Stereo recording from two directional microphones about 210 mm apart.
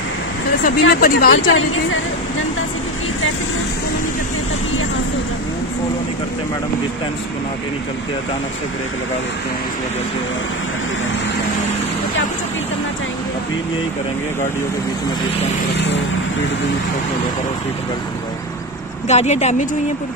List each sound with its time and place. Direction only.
0.7 s speech: 45° left (ahead or behind)
19.0 s speech: 30° left (ahead or behind)